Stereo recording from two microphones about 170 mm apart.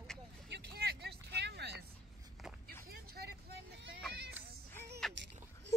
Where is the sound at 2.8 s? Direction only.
65° right (ahead or behind).